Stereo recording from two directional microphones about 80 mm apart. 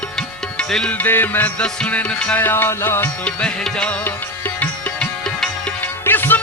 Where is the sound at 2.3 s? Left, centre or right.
Left.